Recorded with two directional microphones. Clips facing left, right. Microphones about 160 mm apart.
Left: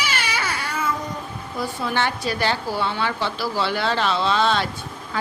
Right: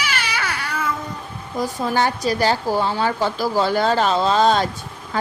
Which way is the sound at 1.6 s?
40° right (ahead or behind).